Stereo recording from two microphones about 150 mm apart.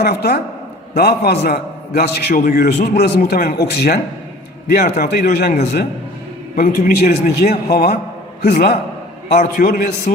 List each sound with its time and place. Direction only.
0.0 s a man's voice: 90° left
6.6 s a man's voice: 75° left (ahead or behind)
9.4 s a man's voice: 70° left (ahead or behind)